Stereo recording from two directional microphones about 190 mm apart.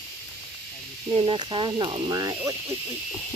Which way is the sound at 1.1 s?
25° right (ahead or behind).